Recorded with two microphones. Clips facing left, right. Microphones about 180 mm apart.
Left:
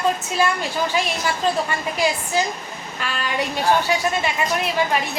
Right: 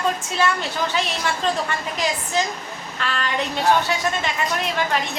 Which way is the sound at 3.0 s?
10° left (ahead or behind).